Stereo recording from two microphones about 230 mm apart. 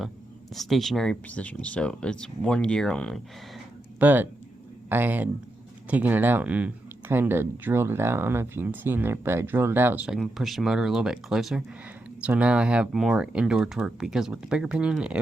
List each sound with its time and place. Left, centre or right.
0.5 s speech: centre
4.0 s speech: centre